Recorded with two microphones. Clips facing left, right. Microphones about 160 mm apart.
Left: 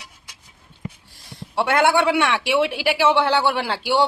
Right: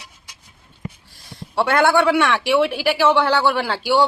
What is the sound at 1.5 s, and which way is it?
Speech, 20° left (ahead or behind).